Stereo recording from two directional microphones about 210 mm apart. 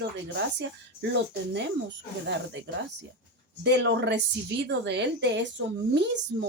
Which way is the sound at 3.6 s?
55° right (ahead or behind).